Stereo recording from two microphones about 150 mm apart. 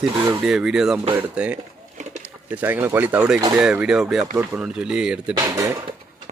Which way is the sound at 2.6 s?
10° right (ahead or behind).